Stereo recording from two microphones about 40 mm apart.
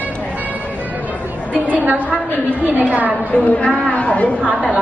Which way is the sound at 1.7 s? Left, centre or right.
Right.